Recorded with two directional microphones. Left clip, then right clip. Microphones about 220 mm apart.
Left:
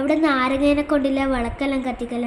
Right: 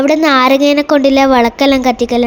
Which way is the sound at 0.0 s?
35° right (ahead or behind).